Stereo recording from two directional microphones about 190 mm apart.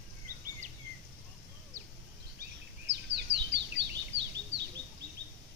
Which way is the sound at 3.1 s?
65° right (ahead or behind).